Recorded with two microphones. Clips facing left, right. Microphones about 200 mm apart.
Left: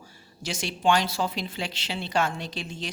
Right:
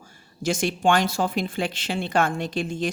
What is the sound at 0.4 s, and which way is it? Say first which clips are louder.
A woman's voice: right 4 dB; 50° right (ahead or behind).